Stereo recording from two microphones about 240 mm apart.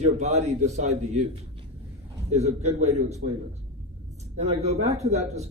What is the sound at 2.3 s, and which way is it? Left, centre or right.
Speech, right.